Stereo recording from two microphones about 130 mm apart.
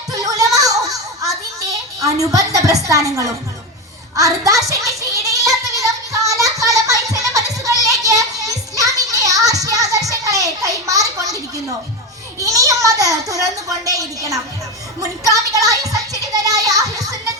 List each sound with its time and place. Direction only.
0.1 s a sound: 25° right (ahead or behind)
2.0 s a child's voice: 25° right (ahead or behind)
4.1 s a sound: 25° right (ahead or behind)
9.1 s music: 25° right (ahead or behind)
12.4 s a child's voice: 25° right (ahead or behind)
15.2 s music: 25° right (ahead or behind)